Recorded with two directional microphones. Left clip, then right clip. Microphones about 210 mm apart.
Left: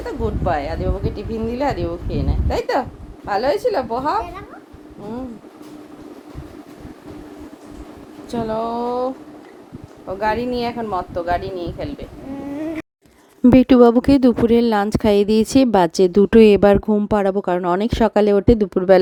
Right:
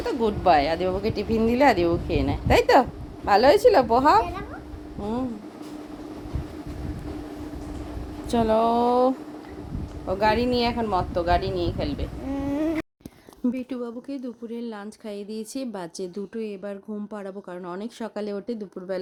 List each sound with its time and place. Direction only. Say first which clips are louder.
0.0 s a woman's voice: right 1 dB; 15° right (ahead or behind); by 4.2 s 40° right (ahead or behind)
8.3 s speech: right 2 dB; 20° right (ahead or behind)
10.1 s speech: left 1 dB; 5° right (ahead or behind)
13.4 s a woman's voice: left 19 dB; 40° left (ahead or behind)